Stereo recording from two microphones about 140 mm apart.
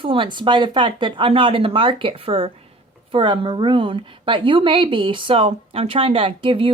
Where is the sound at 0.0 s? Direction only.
40° right (ahead or behind).